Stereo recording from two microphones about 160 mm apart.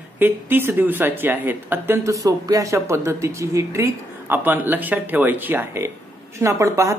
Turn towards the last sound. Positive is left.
turn(degrees=-20)  # may be behind; listen again after turning